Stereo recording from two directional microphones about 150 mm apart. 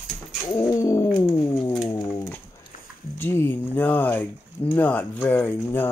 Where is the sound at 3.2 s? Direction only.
15° left (ahead or behind).